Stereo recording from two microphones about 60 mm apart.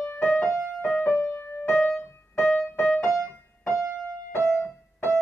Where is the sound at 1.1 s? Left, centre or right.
Left.